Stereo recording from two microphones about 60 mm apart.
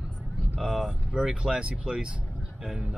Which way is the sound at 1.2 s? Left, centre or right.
Centre.